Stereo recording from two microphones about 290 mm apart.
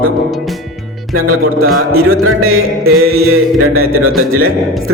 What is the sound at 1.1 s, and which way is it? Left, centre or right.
Music, right.